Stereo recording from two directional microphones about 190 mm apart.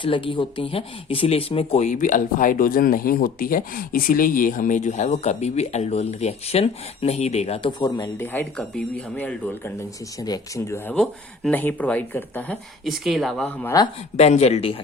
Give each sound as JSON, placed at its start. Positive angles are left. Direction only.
{"t": 0.0, "sound": "speech", "side_deg": 25}
{"t": 10.2, "sound": "speech", "side_deg": 20}
{"t": 10.9, "sound": "speech", "side_deg": 5}
{"t": 14.2, "sound": "speech", "side_deg": 35}